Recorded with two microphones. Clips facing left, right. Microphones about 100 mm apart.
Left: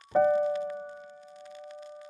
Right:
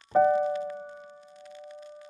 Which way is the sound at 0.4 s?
Centre (ahead or behind).